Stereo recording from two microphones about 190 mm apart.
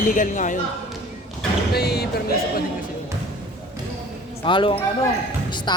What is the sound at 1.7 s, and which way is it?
Speech, 55° left (ahead or behind).